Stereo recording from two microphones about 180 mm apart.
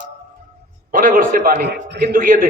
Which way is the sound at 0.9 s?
50° right (ahead or behind).